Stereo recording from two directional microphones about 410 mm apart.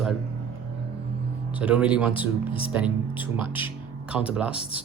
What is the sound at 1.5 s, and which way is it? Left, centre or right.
Speech, centre.